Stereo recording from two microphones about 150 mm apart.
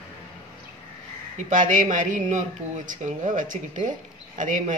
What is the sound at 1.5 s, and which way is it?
Speech, 55° right (ahead or behind).